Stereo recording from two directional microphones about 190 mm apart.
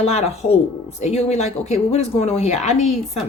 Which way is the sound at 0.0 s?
35° left (ahead or behind).